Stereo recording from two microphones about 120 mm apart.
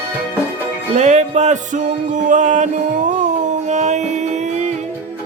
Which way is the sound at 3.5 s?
75° right (ahead or behind).